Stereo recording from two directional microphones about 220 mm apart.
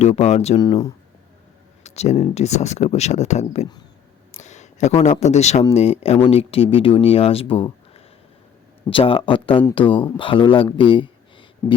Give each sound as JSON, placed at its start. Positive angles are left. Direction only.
{"t": 0.0, "sound": "speech", "side_deg": 30}
{"t": 0.6, "sound": "speech", "side_deg": 20}
{"t": 1.8, "sound": "speech", "side_deg": 30}